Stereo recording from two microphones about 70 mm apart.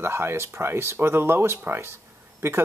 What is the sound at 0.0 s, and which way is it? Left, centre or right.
Speech, right.